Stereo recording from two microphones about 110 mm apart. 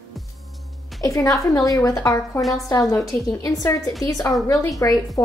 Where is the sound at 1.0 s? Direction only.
30° left (ahead or behind).